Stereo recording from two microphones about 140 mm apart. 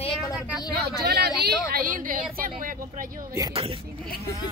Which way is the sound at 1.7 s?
75° right (ahead or behind).